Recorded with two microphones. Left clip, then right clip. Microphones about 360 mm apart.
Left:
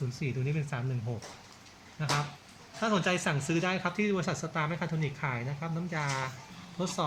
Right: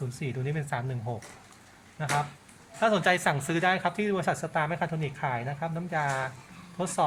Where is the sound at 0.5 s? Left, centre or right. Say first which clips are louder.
Right 5 dB; right.